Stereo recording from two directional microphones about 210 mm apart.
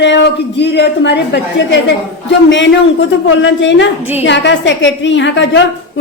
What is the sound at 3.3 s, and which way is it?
A woman's voice, 60° left (ahead or behind).